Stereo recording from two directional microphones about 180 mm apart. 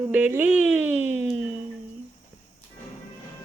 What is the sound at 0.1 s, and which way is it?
Speech, 10° right (ahead or behind).